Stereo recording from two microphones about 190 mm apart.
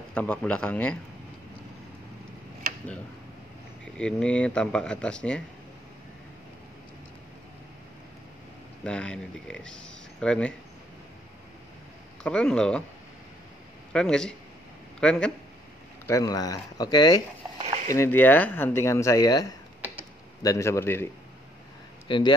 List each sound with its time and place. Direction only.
0.1 s speech: 5° left (ahead or behind)
3.8 s speech: 5° left (ahead or behind)
8.8 s speech: 5° left (ahead or behind)
12.2 s speech: 5° left (ahead or behind)
13.9 s speech: 5° left (ahead or behind)
16.1 s speech: 20° left (ahead or behind)
17.6 s stir: 35° right (ahead or behind)
17.8 s speech: 15° left (ahead or behind)
22.0 s speech: 25° left (ahead or behind)